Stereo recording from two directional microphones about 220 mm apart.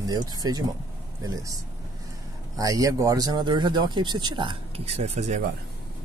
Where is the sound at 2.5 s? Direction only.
15° right (ahead or behind); by 5.4 s 30° right (ahead or behind).